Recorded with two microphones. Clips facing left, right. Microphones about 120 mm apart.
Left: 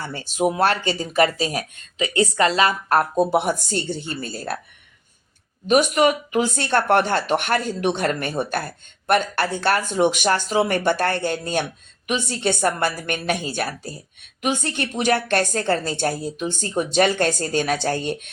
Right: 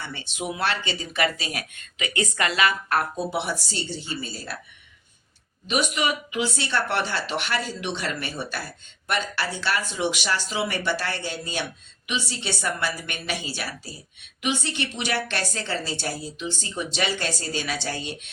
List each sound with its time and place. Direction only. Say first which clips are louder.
0.0 s speech: left 10 dB; 40° left (ahead or behind)
5.6 s speech: left 8 dB; 45° left (ahead or behind)